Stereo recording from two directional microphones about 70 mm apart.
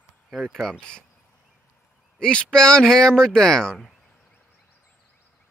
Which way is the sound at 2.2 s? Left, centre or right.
Centre.